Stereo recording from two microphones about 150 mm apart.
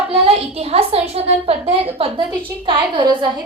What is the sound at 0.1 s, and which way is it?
A woman's voice, 40° right (ahead or behind).